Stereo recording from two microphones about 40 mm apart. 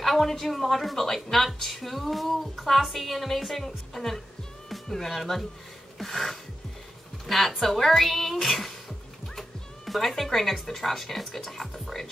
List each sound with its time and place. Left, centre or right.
0.0 s speech: centre
5.9 s a sound: centre
7.2 s speech: centre